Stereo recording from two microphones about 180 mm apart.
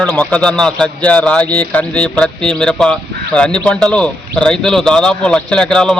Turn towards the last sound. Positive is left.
turn(degrees=5)  # may be behind; listen again after turning